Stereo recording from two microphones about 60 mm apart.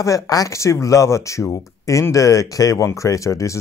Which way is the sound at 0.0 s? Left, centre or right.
Left.